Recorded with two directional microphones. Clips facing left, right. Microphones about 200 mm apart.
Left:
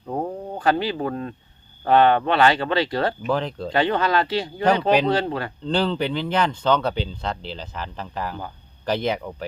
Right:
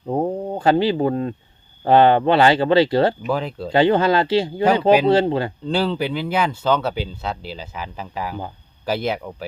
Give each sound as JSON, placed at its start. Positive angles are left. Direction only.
{"t": 0.1, "sound": "speech", "side_deg": -25}
{"t": 3.2, "sound": "speech", "side_deg": -10}
{"t": 3.7, "sound": "speech", "side_deg": -30}
{"t": 5.6, "sound": "speech", "side_deg": -5}